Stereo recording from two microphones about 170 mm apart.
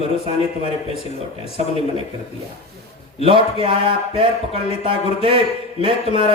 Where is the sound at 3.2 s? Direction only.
30° right (ahead or behind).